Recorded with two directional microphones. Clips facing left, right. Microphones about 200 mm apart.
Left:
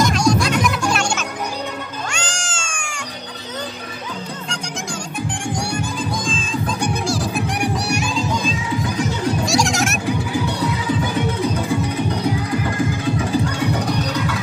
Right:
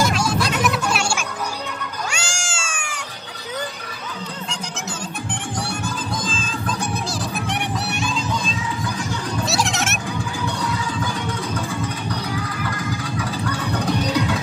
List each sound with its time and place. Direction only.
0.0 s music: 5° right (ahead or behind)
2.0 s cat: 10° right (ahead or behind)
5.6 s music: 5° right (ahead or behind)
8.8 s music: 20° left (ahead or behind)
9.5 s goat: centre (ahead or behind)
10.0 s music: 20° left (ahead or behind)